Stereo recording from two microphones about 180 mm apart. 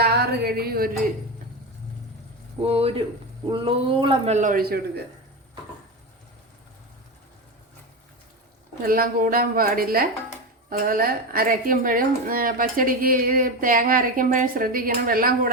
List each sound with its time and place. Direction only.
0.0 s a sound: 65° right (ahead or behind)
2.6 s a man's voice: 35° right (ahead or behind); by 4.8 s 50° right (ahead or behind)
8.8 s a woman's voice: 55° right (ahead or behind)